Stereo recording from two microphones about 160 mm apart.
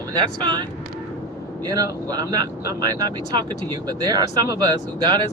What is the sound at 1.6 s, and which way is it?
Speech, 25° right (ahead or behind).